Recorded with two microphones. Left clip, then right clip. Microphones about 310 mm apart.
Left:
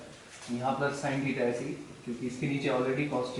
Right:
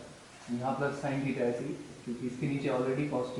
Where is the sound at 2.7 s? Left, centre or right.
Centre.